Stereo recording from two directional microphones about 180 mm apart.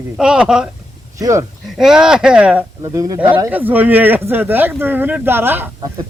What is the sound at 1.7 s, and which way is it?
Speech, 5° right (ahead or behind).